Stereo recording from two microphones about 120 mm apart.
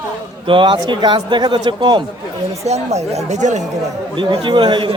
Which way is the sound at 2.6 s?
65° right (ahead or behind).